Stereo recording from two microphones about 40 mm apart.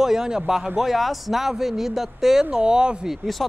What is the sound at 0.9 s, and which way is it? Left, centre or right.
Speech, centre.